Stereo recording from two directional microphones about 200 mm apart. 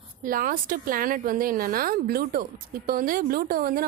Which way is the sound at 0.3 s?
45° right (ahead or behind).